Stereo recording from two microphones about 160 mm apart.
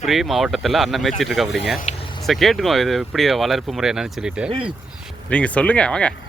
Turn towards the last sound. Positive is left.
turn(degrees=5)  # may be behind; listen again after turning